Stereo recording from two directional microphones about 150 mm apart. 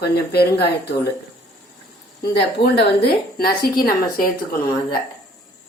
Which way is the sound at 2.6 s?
90° left.